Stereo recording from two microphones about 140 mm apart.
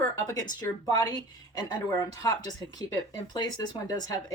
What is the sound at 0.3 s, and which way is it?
Speech, 25° left (ahead or behind).